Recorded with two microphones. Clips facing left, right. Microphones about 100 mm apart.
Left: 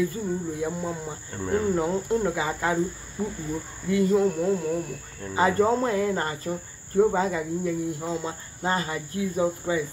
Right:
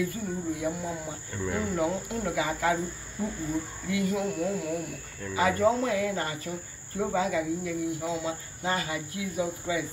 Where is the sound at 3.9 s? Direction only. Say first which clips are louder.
Left 8 dB; 35° left (ahead or behind).